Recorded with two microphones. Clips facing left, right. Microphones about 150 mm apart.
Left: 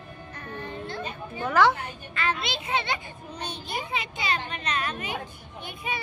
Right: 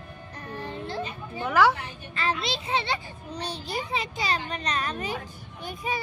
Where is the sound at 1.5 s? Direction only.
10° right (ahead or behind).